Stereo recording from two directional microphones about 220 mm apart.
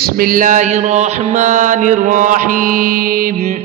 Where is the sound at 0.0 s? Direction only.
40° right (ahead or behind).